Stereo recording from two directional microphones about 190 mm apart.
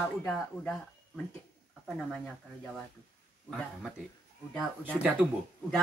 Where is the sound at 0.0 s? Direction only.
5° left (ahead or behind).